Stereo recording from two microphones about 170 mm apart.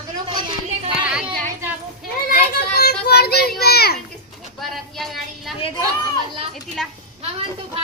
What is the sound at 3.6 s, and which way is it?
Children playing, 70° left (ahead or behind).